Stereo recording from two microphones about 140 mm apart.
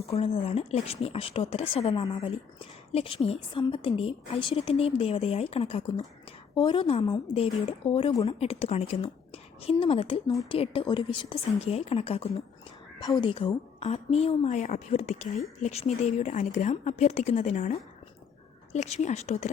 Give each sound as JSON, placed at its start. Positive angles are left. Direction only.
{"t": 0.0, "sound": "speech", "side_deg": 45}
{"t": 13.0, "sound": "a woman's voice", "side_deg": 30}
{"t": 13.8, "sound": "a woman's voice", "side_deg": 50}